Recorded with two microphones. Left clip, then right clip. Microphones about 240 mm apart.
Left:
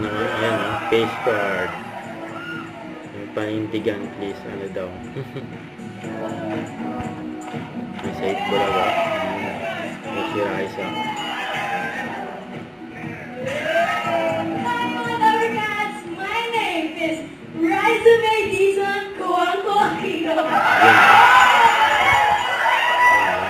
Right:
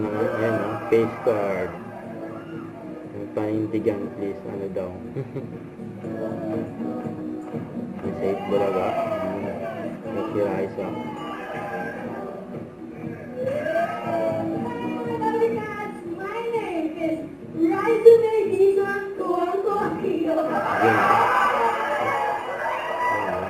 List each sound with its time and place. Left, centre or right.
0.1 s speech: centre
3.3 s speech: centre
8.2 s music: centre
13.4 s music: centre
17.7 s a sound: centre